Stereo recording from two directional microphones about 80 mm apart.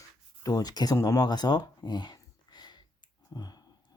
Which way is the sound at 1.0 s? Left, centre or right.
Left.